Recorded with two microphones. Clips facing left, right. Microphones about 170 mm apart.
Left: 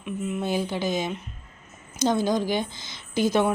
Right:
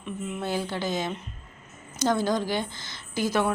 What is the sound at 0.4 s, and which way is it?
A woman's voice, 15° left (ahead or behind).